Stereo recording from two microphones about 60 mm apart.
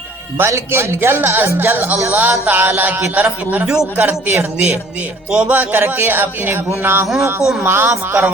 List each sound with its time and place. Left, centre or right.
0.3 s a man's voice: right
3.5 s a man's voice: right
7.2 s speech: right
7.6 s speech: right